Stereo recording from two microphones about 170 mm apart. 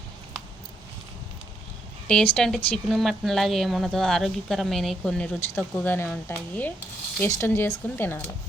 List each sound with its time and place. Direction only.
2.0 s speech: 5° left (ahead or behind)